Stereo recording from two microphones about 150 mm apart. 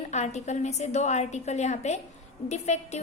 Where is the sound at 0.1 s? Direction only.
50° left (ahead or behind).